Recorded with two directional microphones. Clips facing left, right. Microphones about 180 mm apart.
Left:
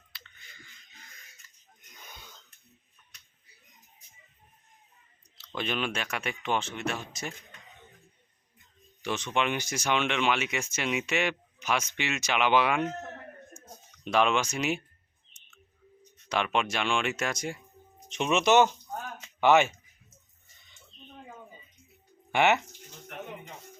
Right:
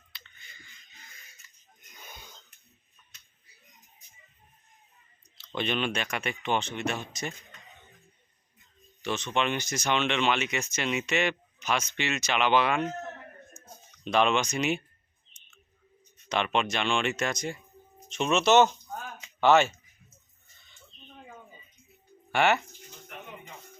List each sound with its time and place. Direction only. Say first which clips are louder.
2.0 s wheeze: right 2 dB; 10° right (ahead or behind)
5.5 s speech: right 2 dB; 5° left (ahead or behind)
9.0 s speech: even; 10° left (ahead or behind)
14.0 s speech: right 1 dB; 5° left (ahead or behind)
16.3 s speech: right 1 dB; 5° left (ahead or behind)
22.3 s speech: even; 20° left (ahead or behind)